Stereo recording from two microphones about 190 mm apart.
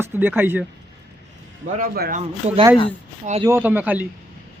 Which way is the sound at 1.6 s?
45° right (ahead or behind).